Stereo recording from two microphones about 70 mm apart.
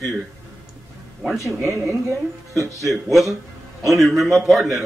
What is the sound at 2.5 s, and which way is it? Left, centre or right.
Speech, right.